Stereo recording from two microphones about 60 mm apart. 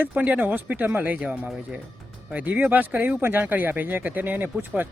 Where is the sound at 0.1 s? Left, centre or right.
Right.